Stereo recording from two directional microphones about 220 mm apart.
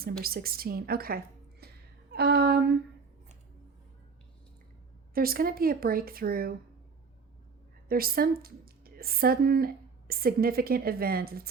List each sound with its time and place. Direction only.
0.2 s a woman's voice: 45° right (ahead or behind)
1.6 s a sound: 45° right (ahead or behind)
5.1 s a woman's voice: 40° right (ahead or behind)
7.9 s a woman's voice: 40° right (ahead or behind)